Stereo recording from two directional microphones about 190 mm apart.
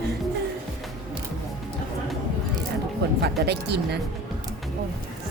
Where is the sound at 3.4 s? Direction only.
60° right (ahead or behind).